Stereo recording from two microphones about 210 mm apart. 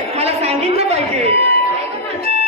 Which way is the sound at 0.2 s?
30° right (ahead or behind).